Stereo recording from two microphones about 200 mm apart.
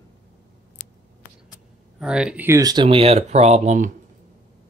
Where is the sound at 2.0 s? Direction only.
5° right (ahead or behind); by 3.8 s 35° right (ahead or behind).